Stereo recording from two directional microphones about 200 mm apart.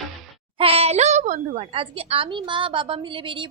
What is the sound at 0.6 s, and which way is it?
A child's voice, 30° right (ahead or behind).